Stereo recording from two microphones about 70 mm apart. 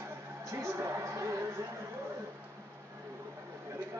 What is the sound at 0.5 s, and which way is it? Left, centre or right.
Speech, right.